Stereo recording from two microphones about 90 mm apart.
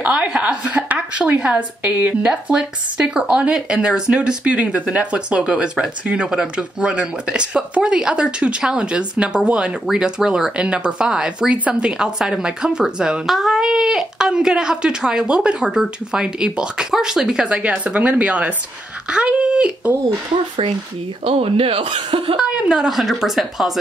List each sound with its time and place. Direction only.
0.0 s speech: 15° right (ahead or behind)
21.3 s speech: 90° right
22.4 s a woman's voice: 10° right (ahead or behind)